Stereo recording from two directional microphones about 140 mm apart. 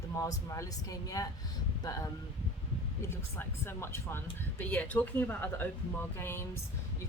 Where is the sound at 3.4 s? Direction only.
20° left (ahead or behind).